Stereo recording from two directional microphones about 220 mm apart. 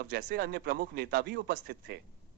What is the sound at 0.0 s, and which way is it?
A man's voice, 50° right (ahead or behind).